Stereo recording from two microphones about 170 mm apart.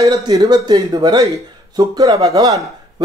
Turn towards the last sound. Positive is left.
turn(degrees=-20)  # may be behind; listen again after turning